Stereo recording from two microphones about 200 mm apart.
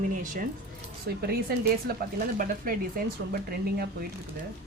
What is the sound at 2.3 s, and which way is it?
Speech, 45° right (ahead or behind).